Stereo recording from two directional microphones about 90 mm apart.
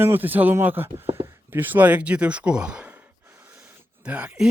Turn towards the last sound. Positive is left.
turn(degrees=-15)  # may be behind; listen again after turning